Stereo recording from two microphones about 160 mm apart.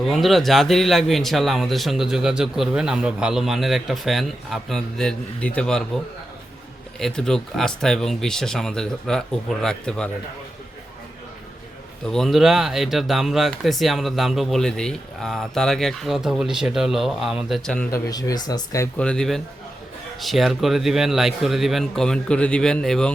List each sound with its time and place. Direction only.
0.0 s a man's voice: centre (ahead or behind)
7.0 s a man's voice: 5° left (ahead or behind)
12.0 s a man's voice: centre (ahead or behind)
17.9 s speech: 25° left (ahead or behind)
18.9 s a man's voice: 5° left (ahead or behind)